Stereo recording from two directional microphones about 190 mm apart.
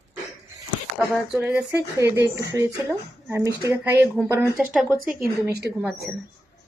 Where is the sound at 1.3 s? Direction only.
5° right (ahead or behind).